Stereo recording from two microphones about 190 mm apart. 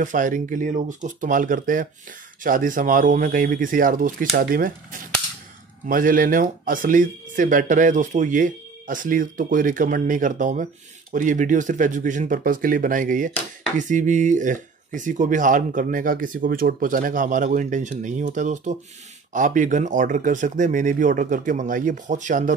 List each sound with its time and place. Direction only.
0.0 s speech: 40° right (ahead or behind)
5.9 s speech: 45° right (ahead or behind)